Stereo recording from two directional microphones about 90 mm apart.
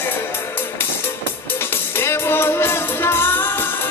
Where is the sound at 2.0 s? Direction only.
25° left (ahead or behind).